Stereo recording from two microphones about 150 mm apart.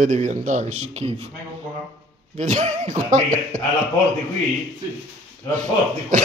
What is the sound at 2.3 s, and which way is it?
Speech, 50° right (ahead or behind).